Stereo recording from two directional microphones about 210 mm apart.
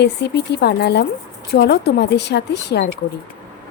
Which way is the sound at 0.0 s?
55° left (ahead or behind).